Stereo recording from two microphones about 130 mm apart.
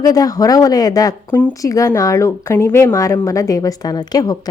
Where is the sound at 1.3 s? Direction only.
15° left (ahead or behind).